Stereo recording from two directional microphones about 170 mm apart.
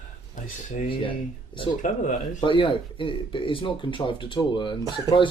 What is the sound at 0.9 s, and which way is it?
Speech, 30° left (ahead or behind).